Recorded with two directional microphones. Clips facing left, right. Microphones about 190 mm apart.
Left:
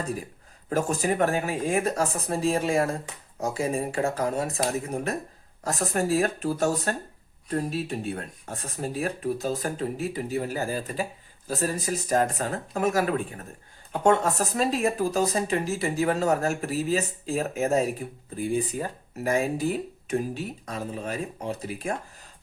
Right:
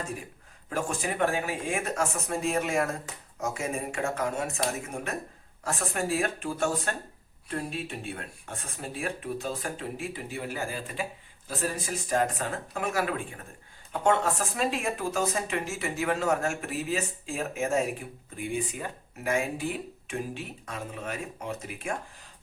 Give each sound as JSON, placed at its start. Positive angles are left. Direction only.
{"t": 0.0, "sound": "speech", "side_deg": 35}